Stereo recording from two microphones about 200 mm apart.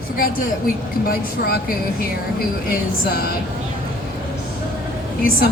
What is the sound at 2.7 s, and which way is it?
Speech, 50° left (ahead or behind).